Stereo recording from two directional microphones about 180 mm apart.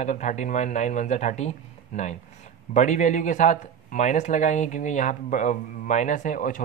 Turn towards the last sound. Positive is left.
turn(degrees=45)  # may be behind; listen again after turning